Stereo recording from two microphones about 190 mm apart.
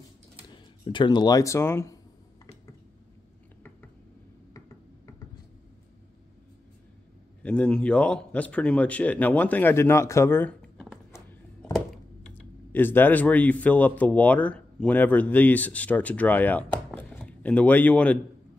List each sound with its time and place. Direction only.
0.8 s speech: 25° left (ahead or behind)
7.4 s speech: 5° left (ahead or behind)
11.7 s a sound: centre (ahead or behind)
12.7 s speech: 10° left (ahead or behind)
16.7 s chopping: 10° left (ahead or behind)